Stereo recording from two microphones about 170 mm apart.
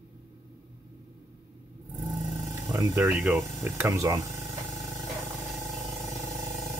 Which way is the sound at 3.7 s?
15° right (ahead or behind).